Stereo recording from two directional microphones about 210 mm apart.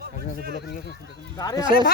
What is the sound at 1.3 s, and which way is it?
Speech, 15° left (ahead or behind).